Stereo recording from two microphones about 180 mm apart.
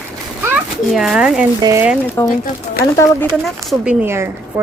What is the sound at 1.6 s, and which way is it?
Speech, 15° right (ahead or behind).